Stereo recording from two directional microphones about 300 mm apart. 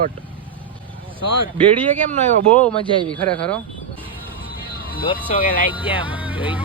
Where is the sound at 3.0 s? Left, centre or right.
Centre.